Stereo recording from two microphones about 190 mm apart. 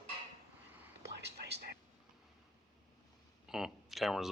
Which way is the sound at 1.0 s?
60° right (ahead or behind).